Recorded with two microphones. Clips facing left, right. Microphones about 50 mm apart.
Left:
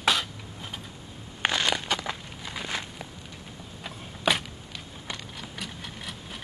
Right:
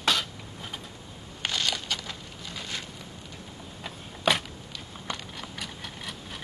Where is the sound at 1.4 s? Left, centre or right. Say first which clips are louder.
Left 4 dB; left.